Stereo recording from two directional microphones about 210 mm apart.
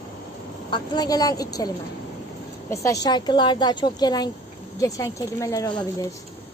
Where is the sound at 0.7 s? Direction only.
20° left (ahead or behind).